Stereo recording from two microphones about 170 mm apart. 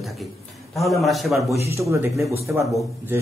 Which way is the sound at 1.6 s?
15° right (ahead or behind).